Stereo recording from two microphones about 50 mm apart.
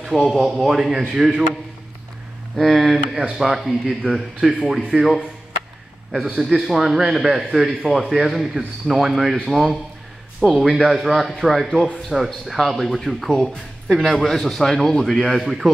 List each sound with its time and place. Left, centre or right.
0.1 s speech: centre
2.5 s speech: centre
3.2 s speech: centre
6.2 s speech: centre
6.7 s speech: centre
10.9 s a man's voice: centre
15.3 s speech: centre